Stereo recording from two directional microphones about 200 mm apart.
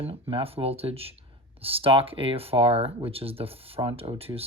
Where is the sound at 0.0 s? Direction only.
25° right (ahead or behind).